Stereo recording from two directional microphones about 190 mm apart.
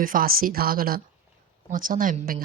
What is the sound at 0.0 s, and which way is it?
Speech, 50° right (ahead or behind).